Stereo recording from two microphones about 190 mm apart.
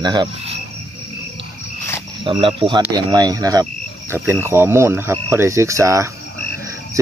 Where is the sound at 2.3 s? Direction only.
25° right (ahead or behind).